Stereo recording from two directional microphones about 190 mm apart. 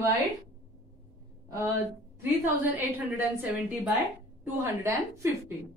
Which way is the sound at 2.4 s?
10° right (ahead or behind).